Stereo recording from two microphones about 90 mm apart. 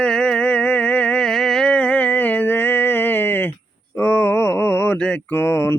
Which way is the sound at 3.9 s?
25° left (ahead or behind).